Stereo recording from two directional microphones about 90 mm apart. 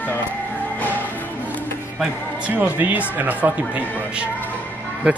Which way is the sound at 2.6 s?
20° right (ahead or behind).